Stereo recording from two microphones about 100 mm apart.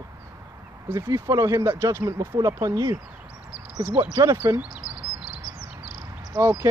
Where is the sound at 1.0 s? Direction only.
35° right (ahead or behind).